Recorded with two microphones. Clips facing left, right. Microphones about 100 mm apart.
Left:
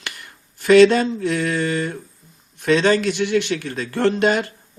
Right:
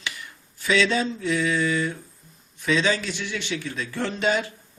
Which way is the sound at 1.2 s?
65° left (ahead or behind).